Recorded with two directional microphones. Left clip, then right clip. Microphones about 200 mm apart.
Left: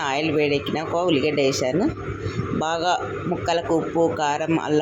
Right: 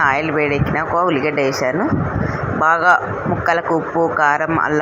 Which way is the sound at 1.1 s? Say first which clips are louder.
Right 3 dB; 25° right (ahead or behind).